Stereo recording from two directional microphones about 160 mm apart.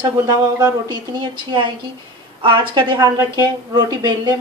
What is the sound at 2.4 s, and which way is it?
Speech, 30° right (ahead or behind).